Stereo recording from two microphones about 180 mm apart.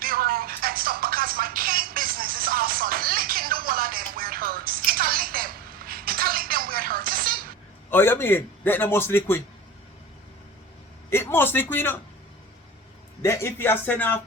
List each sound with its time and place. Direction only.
0.0 s music: 55° right (ahead or behind)
7.9 s a man's voice: 10° left (ahead or behind)
11.1 s a man's voice: 10° left (ahead or behind)
13.2 s a man's voice: 15° left (ahead or behind)